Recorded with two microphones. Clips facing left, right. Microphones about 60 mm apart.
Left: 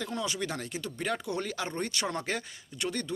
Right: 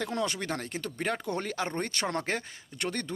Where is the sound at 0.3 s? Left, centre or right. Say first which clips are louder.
Even; right.